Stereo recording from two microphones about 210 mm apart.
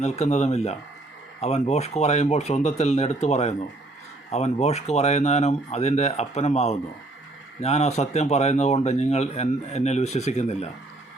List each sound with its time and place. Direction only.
0.0 s speech: 30° left (ahead or behind)